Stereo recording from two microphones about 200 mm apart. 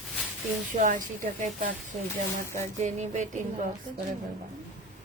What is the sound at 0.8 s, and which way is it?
Speech, 40° right (ahead or behind).